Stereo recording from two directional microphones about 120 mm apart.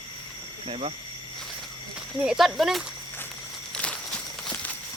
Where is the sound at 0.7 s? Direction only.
55° right (ahead or behind).